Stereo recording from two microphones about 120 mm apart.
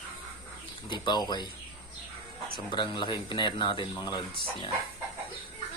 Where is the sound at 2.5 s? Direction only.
40° left (ahead or behind).